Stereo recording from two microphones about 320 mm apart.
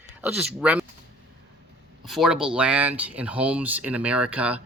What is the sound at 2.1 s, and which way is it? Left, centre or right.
Speech, centre.